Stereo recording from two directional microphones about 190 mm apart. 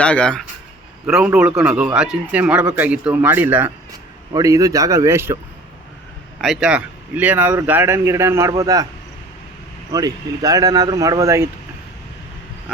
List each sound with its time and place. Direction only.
0.0 s a man's voice: 5° left (ahead or behind); by 5.4 s 15° right (ahead or behind)
6.4 s a man's voice: centre (ahead or behind); by 8.9 s 20° right (ahead or behind)
9.9 s speech: 20° right (ahead or behind)